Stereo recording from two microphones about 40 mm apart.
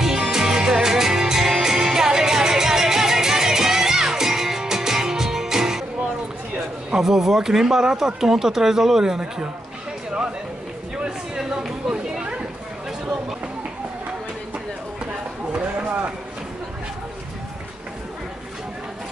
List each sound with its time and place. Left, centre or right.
0.0 s music: centre
6.9 s speech: centre
11.1 s a sound: centre